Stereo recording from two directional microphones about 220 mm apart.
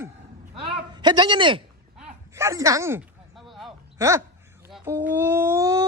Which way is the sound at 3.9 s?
15° right (ahead or behind).